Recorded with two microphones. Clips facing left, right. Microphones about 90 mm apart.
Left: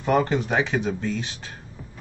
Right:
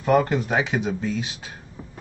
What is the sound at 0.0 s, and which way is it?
Speech, centre (ahead or behind).